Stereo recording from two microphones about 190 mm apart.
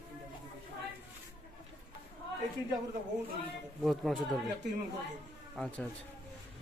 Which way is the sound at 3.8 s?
Centre (ahead or behind).